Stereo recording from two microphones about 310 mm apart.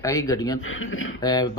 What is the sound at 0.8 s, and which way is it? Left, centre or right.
Speech, left.